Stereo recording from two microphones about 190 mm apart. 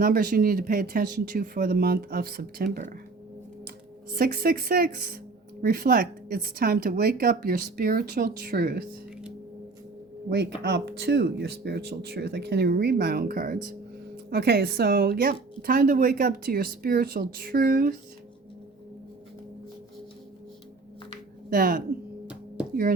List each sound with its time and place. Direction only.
0.0 s a woman's voice: 50° right (ahead or behind)
4.1 s a woman's voice: 50° right (ahead or behind)
10.2 s a woman's voice: 60° right (ahead or behind)
21.5 s a woman's voice: 50° right (ahead or behind)